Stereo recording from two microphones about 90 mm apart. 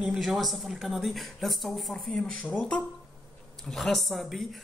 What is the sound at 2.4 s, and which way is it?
Speech, 15° left (ahead or behind).